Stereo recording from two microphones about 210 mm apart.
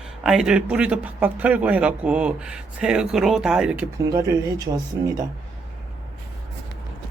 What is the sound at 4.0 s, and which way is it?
Speech, 15° right (ahead or behind).